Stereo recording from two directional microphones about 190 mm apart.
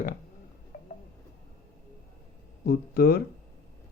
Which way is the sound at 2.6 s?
55° left (ahead or behind).